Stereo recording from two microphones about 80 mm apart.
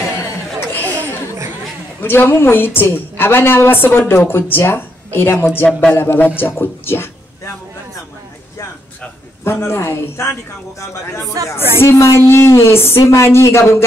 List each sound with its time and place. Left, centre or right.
0.7 s a sound: left
2.0 s a woman's voice: left
9.4 s a woman's voice: left